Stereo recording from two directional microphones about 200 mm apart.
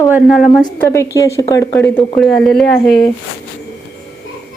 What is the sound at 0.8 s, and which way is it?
Speech, 15° left (ahead or behind).